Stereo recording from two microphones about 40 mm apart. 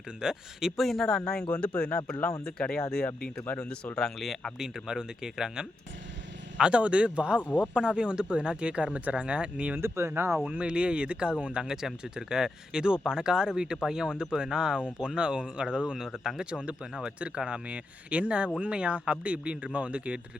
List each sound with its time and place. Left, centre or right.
0.2 s speech: centre
0.8 s speech: centre
1.0 s speech: centre
1.5 s speech: left
2.6 s speech: centre
4.5 s speech: centre
6.6 s speech: right
9.7 s speech: right
10.4 s speech: right
11.6 s speech: centre
16.5 s speech: right